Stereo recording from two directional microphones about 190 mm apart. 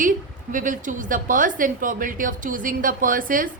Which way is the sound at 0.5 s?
45° right (ahead or behind).